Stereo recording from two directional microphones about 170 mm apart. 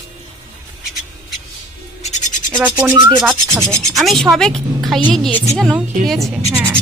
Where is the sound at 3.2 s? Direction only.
15° right (ahead or behind).